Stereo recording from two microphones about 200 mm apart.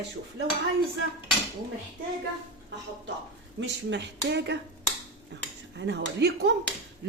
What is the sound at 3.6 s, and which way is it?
Speech, 60° right (ahead or behind).